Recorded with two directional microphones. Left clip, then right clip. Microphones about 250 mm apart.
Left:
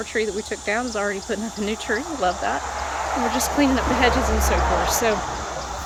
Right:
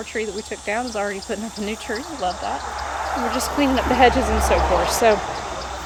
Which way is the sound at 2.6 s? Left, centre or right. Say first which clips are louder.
Even; left.